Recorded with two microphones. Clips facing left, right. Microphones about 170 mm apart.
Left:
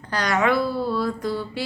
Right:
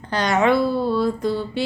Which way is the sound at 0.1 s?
25° right (ahead or behind).